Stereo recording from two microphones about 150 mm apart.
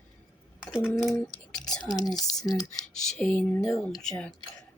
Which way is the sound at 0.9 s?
Centre (ahead or behind).